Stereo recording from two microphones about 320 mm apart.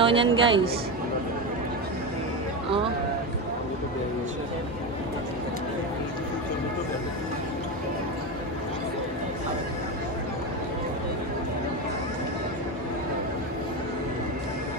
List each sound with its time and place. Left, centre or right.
0.0 s a man's voice: centre